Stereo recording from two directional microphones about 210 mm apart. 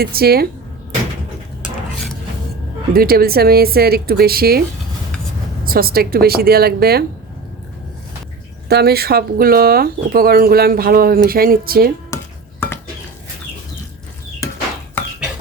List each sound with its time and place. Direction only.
0.0 s speech: 45° right (ahead or behind)
2.9 s speech: 45° right (ahead or behind)
5.6 s speech: 45° right (ahead or behind)
8.7 s speech: 50° right (ahead or behind)
12.1 s dishes: 15° left (ahead or behind)